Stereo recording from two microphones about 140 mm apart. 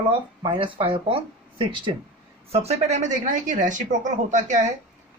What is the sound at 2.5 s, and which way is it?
A woman's voice, 50° right (ahead or behind).